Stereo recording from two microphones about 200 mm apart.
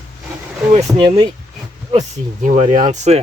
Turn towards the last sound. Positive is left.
turn(degrees=-35)  # may be behind; listen again after turning